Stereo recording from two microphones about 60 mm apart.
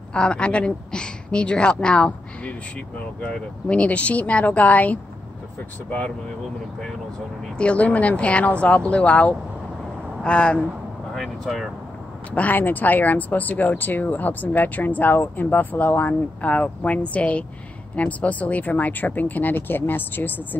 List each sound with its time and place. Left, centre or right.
0.1 s a woman's voice: centre
7.5 s speech: left
11.1 s speech: centre
12.3 s speech: left